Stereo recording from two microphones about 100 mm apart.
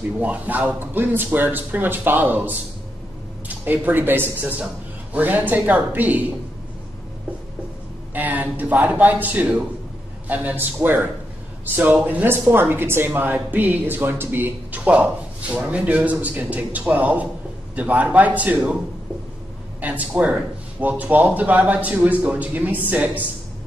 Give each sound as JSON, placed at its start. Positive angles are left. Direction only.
{"t": 0.2, "sound": "speech", "side_deg": -15}
{"t": 8.1, "sound": "a man's voice", "side_deg": -15}
{"t": 19.8, "sound": "speech", "side_deg": -15}